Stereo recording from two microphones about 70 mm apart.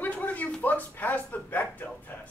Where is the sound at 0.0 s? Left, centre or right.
Left.